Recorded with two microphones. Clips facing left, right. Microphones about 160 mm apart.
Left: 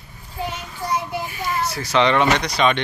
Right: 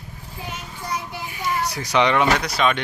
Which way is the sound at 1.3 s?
15° right (ahead or behind).